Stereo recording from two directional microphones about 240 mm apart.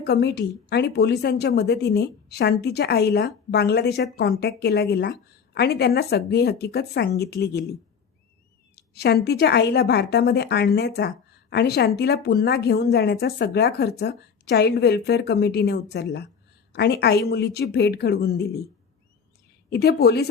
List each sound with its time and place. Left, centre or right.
0.0 s a woman's voice: left
19.7 s a woman's voice: left